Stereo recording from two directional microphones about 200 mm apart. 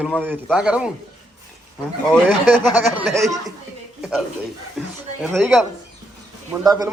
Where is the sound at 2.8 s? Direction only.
5° right (ahead or behind).